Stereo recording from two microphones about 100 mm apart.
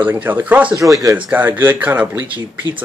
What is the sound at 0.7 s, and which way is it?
Speech, 35° right (ahead or behind).